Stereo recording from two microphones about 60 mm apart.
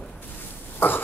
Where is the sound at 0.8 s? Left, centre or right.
Left.